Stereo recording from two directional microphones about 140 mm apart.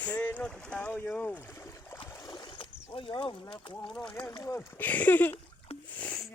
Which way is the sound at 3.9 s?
5° left (ahead or behind).